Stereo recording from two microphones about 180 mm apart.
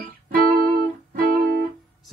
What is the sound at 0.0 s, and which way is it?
Music, 50° right (ahead or behind).